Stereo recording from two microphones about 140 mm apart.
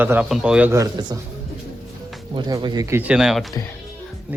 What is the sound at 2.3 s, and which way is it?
Speech, 30° right (ahead or behind).